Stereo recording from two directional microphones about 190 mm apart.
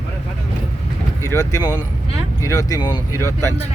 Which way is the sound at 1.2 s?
15° left (ahead or behind).